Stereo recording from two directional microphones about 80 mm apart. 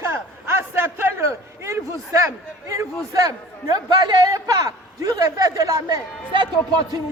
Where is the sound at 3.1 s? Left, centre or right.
Right.